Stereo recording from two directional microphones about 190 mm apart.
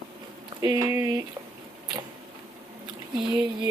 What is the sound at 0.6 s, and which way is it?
Speech, 20° right (ahead or behind).